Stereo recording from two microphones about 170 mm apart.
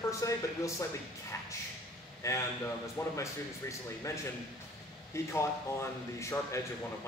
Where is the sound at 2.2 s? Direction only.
20° left (ahead or behind).